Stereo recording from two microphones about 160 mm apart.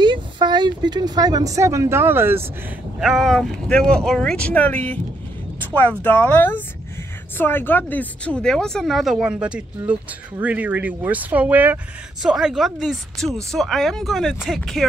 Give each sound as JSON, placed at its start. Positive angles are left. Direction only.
{"t": 0.0, "sound": "speech", "side_deg": -30}
{"t": 3.0, "sound": "speech", "side_deg": 0}